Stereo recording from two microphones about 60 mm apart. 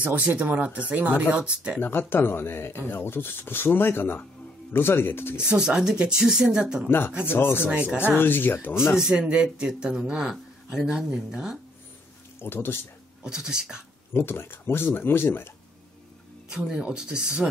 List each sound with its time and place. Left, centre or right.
0.0 s speech: right
1.8 s speech: left
5.5 s speech: centre
6.9 s speech: left
7.7 s speech: right
8.2 s speech: left
8.9 s speech: centre
12.4 s speech: left
13.2 s speech: centre
14.1 s speech: left
16.4 s speech: centre